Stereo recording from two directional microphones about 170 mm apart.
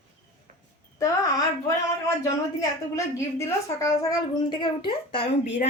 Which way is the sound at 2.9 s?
15° left (ahead or behind).